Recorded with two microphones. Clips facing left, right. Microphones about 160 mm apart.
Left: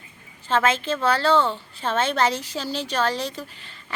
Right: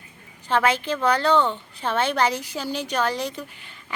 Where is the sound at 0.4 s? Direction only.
15° right (ahead or behind).